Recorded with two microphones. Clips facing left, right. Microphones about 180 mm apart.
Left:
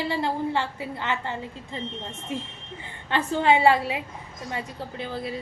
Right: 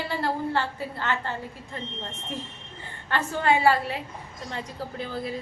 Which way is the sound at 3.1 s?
20° left (ahead or behind).